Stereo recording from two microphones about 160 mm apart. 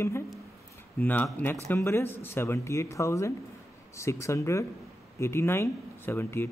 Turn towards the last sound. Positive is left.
turn(degrees=15)  # may be behind; listen again after turning